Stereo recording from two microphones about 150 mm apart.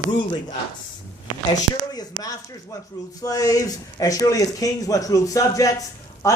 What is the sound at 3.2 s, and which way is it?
Speech, 25° left (ahead or behind).